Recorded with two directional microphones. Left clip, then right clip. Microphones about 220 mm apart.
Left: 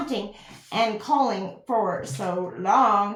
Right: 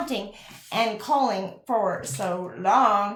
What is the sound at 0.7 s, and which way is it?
Speech, 30° right (ahead or behind).